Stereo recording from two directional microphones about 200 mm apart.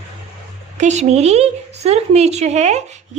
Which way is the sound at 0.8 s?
35° right (ahead or behind).